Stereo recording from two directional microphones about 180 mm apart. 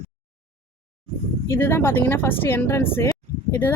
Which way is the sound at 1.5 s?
15° left (ahead or behind).